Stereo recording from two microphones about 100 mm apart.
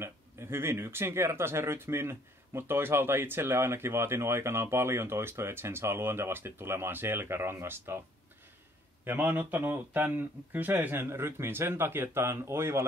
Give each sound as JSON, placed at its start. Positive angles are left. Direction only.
{"t": 0.0, "sound": "speech", "side_deg": -25}
{"t": 9.0, "sound": "speech", "side_deg": -20}